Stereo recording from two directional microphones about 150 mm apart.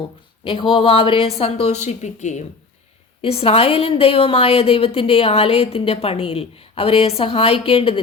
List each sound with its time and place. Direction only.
0.4 s a woman's voice: 35° left (ahead or behind); by 2.4 s 50° left (ahead or behind)
3.2 s a woman's voice: 40° left (ahead or behind)